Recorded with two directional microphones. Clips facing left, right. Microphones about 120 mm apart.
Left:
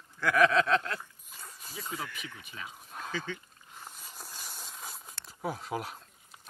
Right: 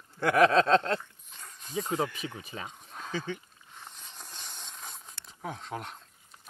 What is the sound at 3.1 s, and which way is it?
Speech, 15° right (ahead or behind).